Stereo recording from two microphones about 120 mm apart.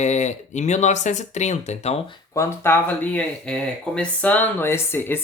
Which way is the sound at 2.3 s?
20° left (ahead or behind).